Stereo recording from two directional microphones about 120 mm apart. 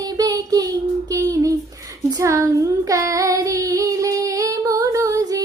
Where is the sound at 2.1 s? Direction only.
25° right (ahead or behind).